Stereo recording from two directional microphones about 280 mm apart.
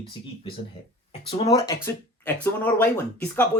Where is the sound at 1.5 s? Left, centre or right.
Centre.